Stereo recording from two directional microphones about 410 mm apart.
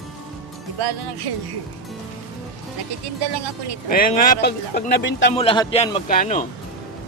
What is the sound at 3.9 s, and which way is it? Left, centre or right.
Speech, centre.